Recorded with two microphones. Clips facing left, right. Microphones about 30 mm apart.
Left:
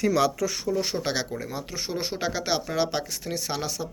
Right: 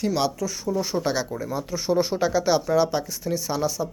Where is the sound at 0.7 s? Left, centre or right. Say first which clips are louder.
Right 2 dB; left.